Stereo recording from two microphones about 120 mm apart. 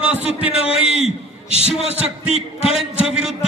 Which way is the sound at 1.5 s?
55° left (ahead or behind).